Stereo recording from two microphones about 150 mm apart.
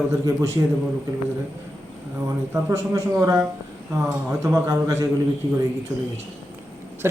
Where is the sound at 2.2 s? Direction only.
20° right (ahead or behind).